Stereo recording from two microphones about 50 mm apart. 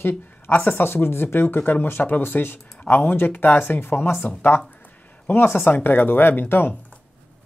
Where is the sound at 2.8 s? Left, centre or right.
Left.